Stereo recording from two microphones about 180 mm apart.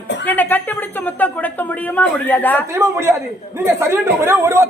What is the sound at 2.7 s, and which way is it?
A man's voice, 15° right (ahead or behind).